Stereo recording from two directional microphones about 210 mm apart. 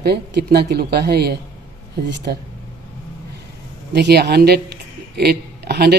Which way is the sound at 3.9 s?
50° right (ahead or behind).